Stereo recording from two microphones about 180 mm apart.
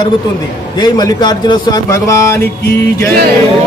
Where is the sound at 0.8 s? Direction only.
20° left (ahead or behind).